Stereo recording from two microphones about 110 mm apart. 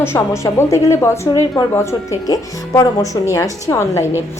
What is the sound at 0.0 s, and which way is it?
A woman's voice, 25° left (ahead or behind).